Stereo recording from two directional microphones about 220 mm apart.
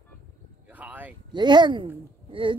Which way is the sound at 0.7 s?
5° right (ahead or behind).